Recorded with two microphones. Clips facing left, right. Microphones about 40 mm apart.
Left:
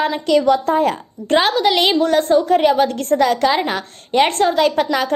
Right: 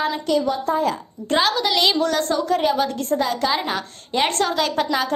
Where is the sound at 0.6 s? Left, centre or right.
Left.